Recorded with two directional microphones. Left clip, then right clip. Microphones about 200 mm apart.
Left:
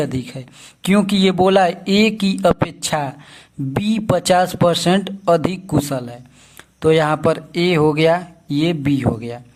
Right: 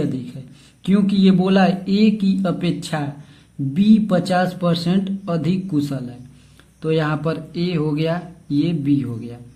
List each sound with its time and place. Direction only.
0.0 s speech: 45° left (ahead or behind)